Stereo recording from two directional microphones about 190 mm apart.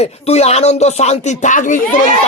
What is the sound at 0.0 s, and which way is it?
Speech, 35° left (ahead or behind).